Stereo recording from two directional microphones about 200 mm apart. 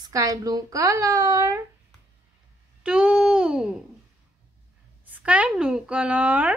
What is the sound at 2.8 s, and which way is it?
Speech, 5° right (ahead or behind).